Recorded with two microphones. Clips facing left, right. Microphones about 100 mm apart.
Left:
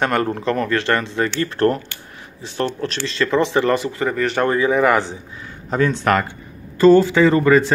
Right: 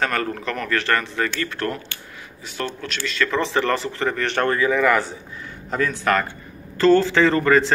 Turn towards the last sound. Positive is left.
turn(degrees=10)  # may be behind; listen again after turning